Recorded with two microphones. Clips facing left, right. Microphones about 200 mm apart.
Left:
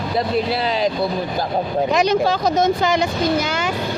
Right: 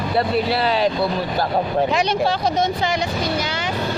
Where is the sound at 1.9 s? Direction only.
45° left (ahead or behind).